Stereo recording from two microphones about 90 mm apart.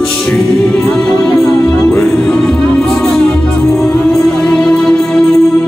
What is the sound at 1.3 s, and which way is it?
Music, 20° left (ahead or behind).